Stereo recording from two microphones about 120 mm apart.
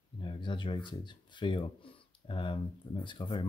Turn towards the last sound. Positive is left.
turn(degrees=40)  # may be behind; listen again after turning